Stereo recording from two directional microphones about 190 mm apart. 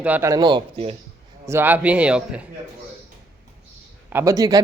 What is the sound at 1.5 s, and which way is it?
Speech, 10° right (ahead or behind).